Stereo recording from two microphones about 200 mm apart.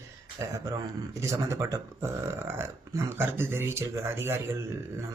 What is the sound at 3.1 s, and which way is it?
Speech, 10° right (ahead or behind).